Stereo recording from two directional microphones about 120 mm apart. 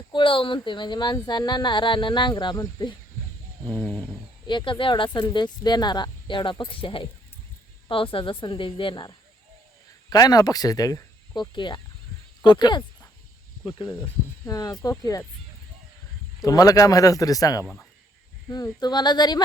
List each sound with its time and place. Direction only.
0.1 s speech: 45° left (ahead or behind)
3.7 s a sound: 10° left (ahead or behind)
4.4 s speech: 45° left (ahead or behind)
14.0 s speech: 30° left (ahead or behind)
16.4 s speech: 30° left (ahead or behind)